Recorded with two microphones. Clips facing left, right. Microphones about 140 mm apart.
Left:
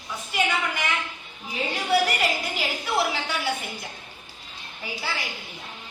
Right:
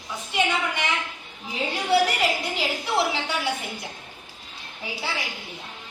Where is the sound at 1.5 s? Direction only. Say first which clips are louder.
Right 2 dB; 25° right (ahead or behind).